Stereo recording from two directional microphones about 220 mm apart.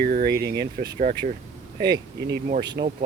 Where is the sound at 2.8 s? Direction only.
45° right (ahead or behind).